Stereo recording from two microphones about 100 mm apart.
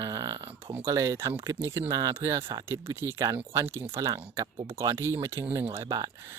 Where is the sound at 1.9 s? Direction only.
35° right (ahead or behind).